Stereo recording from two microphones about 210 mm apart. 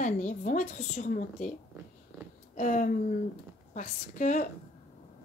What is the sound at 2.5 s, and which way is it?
Speech, 35° left (ahead or behind).